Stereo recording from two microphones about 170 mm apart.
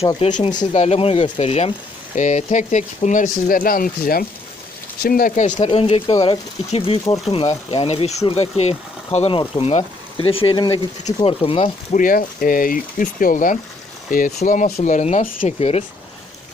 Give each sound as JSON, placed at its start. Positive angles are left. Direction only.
{"t": 0.2, "sound": "speech", "side_deg": 45}
{"t": 0.4, "sound": "speech", "side_deg": 25}
{"t": 0.7, "sound": "speech", "side_deg": 40}
{"t": 5.5, "sound": "speech", "side_deg": 30}
{"t": 11.9, "sound": "speech", "side_deg": 55}